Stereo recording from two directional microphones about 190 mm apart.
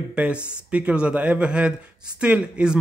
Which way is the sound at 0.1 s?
5° right (ahead or behind).